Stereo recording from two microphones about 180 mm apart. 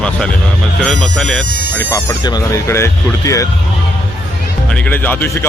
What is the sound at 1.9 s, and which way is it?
Speech, 20° left (ahead or behind).